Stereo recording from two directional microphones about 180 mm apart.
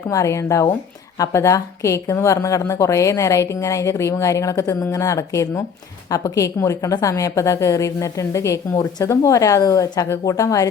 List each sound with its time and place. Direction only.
0.1 s a woman's voice: 15° left (ahead or behind)